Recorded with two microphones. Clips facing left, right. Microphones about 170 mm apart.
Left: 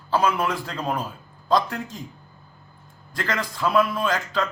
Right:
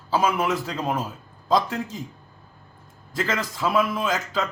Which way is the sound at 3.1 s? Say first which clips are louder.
Right 1 dB; 5° right (ahead or behind).